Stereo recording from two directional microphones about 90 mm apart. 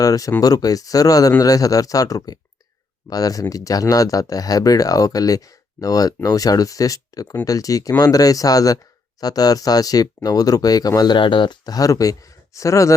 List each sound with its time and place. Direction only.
0.0 s speech: 40° left (ahead or behind)